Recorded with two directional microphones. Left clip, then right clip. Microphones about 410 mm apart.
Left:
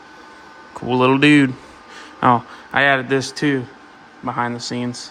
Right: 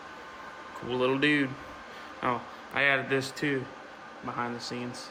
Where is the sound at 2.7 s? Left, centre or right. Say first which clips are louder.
Left 10 dB; centre.